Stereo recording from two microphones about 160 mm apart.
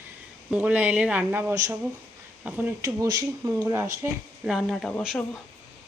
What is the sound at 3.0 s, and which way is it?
Speech, 25° right (ahead or behind).